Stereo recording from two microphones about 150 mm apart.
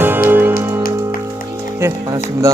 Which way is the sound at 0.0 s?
15° right (ahead or behind).